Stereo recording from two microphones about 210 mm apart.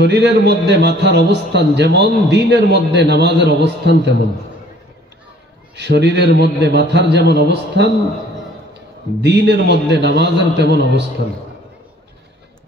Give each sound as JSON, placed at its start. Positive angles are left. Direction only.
{"t": 0.0, "sound": "a man's voice", "side_deg": -55}
{"t": 5.8, "sound": "a man's voice", "side_deg": -55}
{"t": 9.2, "sound": "a man's voice", "side_deg": -55}